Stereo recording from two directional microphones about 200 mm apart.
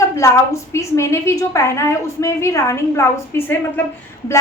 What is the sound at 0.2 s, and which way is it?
A woman's voice, 15° left (ahead or behind).